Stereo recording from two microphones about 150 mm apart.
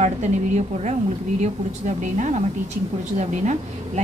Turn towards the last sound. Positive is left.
turn(degrees=-50)  # may be behind; listen again after turning